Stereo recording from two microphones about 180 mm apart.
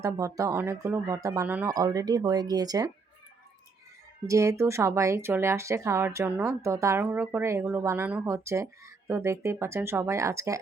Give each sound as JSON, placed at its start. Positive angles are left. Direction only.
{"t": 0.0, "sound": "speech", "side_deg": -20}
{"t": 4.3, "sound": "speech", "side_deg": -15}